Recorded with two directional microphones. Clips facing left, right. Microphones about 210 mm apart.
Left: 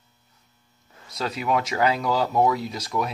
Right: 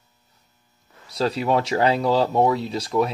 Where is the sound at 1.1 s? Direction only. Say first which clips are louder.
Right 4 dB; 30° right (ahead or behind).